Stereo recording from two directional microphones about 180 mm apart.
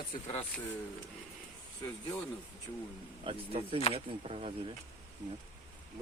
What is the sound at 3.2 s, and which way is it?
Speech, 30° right (ahead or behind).